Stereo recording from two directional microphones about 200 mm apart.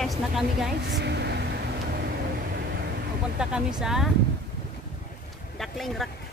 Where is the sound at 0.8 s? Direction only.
60° right (ahead or behind).